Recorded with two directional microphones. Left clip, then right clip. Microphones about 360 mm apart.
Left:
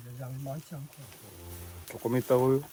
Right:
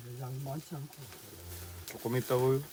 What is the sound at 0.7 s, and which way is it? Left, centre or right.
Speech, centre.